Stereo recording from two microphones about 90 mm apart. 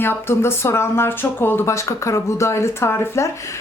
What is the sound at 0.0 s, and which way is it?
A woman's voice, 25° left (ahead or behind).